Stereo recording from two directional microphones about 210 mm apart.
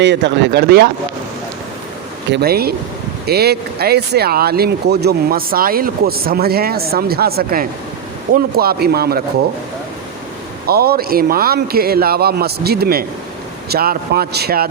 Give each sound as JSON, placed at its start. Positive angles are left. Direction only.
{"t": 0.0, "sound": "speech", "side_deg": -55}
{"t": 2.3, "sound": "speech", "side_deg": -50}
{"t": 10.7, "sound": "speech", "side_deg": -45}